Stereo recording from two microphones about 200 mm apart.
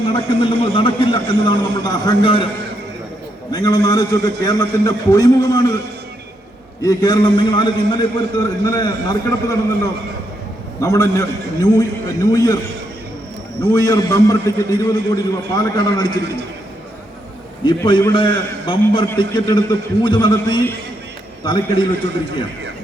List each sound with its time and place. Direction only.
0.1 s a man's voice: 25° left (ahead or behind)
3.5 s a man's voice: 20° left (ahead or behind)
6.8 s a man's voice: 20° left (ahead or behind)
13.7 s a man's voice: 15° left (ahead or behind)
17.6 s a man's voice: 25° left (ahead or behind)